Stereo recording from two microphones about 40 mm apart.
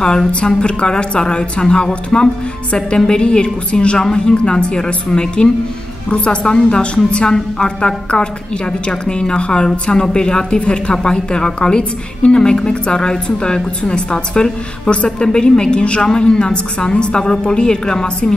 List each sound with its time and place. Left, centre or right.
0.0 s a woman's voice: centre